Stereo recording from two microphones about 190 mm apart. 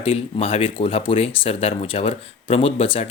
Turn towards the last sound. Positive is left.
turn(degrees=30)  # may be behind; listen again after turning